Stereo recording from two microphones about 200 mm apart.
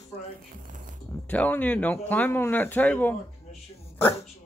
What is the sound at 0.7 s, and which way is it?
Speech, 40° right (ahead or behind).